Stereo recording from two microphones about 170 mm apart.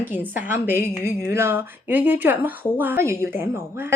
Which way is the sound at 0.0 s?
10° right (ahead or behind).